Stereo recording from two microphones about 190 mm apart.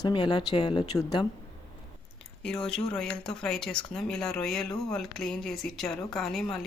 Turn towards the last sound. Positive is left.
turn(degrees=0)  # may be behind; listen again after turning